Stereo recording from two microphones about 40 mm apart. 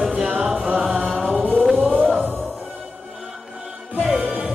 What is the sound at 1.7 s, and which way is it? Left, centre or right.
Music, right.